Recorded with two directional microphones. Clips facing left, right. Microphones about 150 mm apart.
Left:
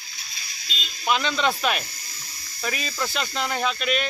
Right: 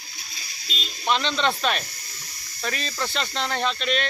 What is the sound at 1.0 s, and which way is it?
Speech, 5° left (ahead or behind).